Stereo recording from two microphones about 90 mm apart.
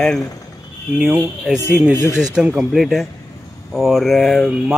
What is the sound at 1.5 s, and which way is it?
Speech, 25° left (ahead or behind).